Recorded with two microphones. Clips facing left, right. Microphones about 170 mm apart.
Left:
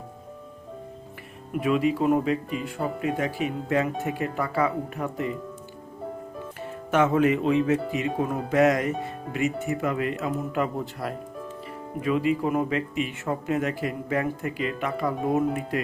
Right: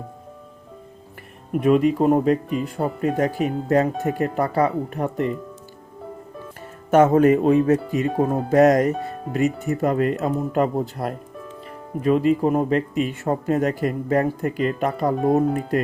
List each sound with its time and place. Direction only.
1.6 s speech: 45° right (ahead or behind)
6.9 s speech: 40° right (ahead or behind)